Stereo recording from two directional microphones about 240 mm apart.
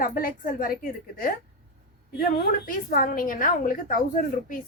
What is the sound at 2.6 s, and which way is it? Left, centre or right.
A woman's voice, left.